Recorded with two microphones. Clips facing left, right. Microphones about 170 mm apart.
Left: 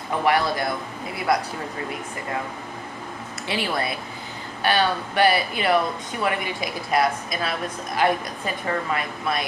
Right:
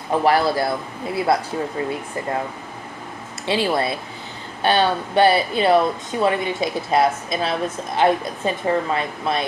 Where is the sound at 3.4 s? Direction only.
25° right (ahead or behind).